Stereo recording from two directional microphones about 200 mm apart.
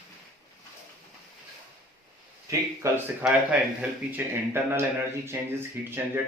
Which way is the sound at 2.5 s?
15° right (ahead or behind).